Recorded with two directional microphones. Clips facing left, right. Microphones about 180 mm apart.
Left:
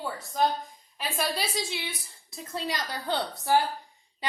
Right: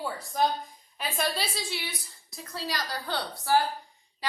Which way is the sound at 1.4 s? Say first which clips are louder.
Left 2 dB; 25° left (ahead or behind).